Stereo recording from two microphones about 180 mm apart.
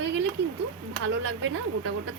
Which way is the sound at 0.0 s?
90° right.